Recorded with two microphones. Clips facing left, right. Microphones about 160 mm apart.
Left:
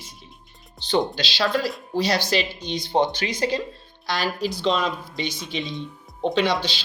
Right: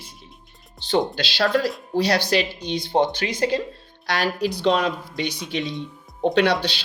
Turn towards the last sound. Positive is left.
turn(degrees=-65)  # may be behind; listen again after turning